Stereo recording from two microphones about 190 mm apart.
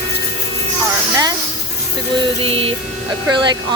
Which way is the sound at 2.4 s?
30° right (ahead or behind).